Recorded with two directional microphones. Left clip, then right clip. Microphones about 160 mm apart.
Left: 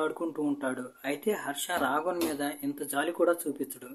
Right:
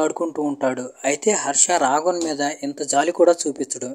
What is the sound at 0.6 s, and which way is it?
Speech, 40° right (ahead or behind).